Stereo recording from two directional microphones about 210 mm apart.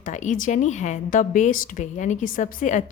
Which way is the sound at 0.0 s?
35° left (ahead or behind).